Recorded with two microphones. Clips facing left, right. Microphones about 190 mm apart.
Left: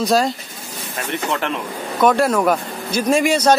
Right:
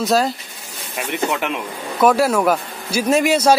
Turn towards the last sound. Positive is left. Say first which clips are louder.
# even
turn(degrees=-5)  # may be behind; listen again after turning